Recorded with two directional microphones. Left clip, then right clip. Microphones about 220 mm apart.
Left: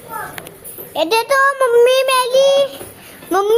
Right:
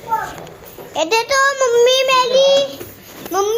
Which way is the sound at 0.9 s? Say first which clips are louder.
Left 1 dB; 20° left (ahead or behind).